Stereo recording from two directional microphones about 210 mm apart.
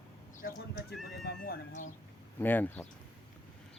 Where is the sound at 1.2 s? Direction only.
50° left (ahead or behind).